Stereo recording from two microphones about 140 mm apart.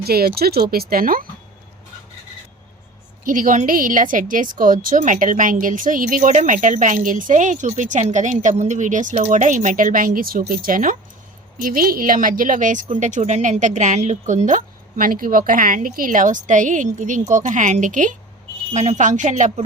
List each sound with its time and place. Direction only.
0.1 s speech: 90° right
3.2 s speech: 75° right (ahead or behind)
11.6 s speech: 90° right; by 19.6 s 55° right (ahead or behind)